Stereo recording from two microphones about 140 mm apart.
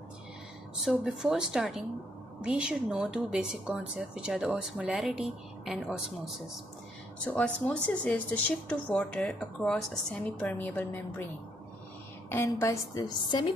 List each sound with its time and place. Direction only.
0.8 s a woman's voice: 5° right (ahead or behind)
7.3 s speech: 10° left (ahead or behind)
12.3 s a woman's voice: 20° left (ahead or behind)